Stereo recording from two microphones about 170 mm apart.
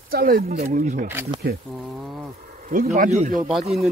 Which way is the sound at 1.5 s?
65° right (ahead or behind).